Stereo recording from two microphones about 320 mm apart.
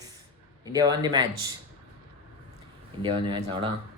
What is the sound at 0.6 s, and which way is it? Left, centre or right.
Speech, centre.